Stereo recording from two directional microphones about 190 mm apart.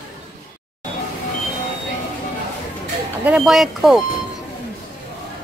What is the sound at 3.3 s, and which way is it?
Speech, 5° right (ahead or behind).